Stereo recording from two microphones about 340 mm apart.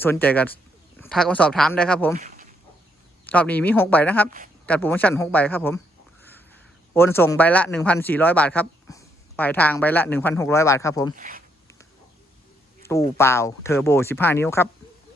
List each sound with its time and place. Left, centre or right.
0.0 s speech: centre
2.1 s a sound: right
3.2 s speech: centre
11.1 s speech: right
12.8 s speech: centre